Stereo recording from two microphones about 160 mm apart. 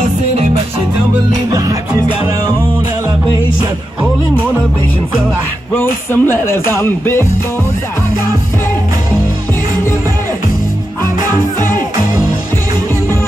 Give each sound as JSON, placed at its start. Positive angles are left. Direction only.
{"t": 1.5, "sound": "music", "side_deg": -20}
{"t": 5.8, "sound": "speech", "side_deg": 15}